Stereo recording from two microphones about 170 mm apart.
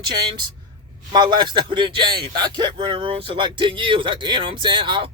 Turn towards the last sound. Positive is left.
turn(degrees=-30)  # may be behind; listen again after turning